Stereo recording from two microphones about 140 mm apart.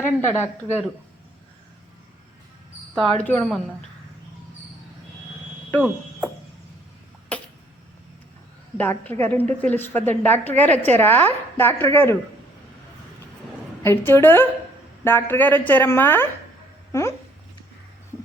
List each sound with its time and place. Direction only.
0.0 s a woman's voice: 15° left (ahead or behind)
3.2 s speech: 5° left (ahead or behind)
5.8 s speech: 10° right (ahead or behind)
8.8 s a woman's voice: 15° left (ahead or behind)
13.8 s a woman's voice: 15° left (ahead or behind)